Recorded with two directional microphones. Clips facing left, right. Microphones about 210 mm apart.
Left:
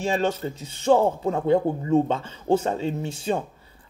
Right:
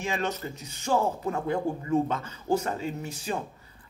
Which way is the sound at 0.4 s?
30° left (ahead or behind).